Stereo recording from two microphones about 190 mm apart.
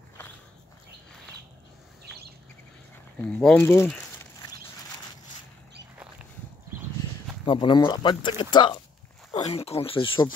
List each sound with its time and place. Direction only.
3.3 s speech: 5° left (ahead or behind)
7.0 s speech: 25° left (ahead or behind)
9.3 s speech: 35° left (ahead or behind)